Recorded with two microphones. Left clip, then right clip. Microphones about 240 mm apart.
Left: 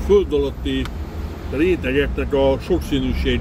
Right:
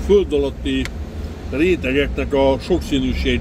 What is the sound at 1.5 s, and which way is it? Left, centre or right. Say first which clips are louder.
Speech: right 1 dB; centre.